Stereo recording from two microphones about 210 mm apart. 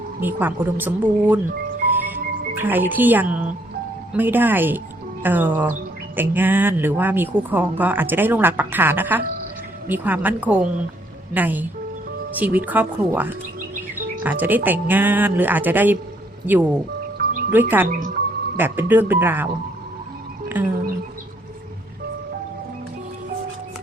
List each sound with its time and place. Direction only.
0.2 s speech: 10° right (ahead or behind)
2.6 s speech: 10° right (ahead or behind)
17.8 s speech: 40° right (ahead or behind)
18.5 s speech: 10° right (ahead or behind)
20.6 s a sound: 10° right (ahead or behind)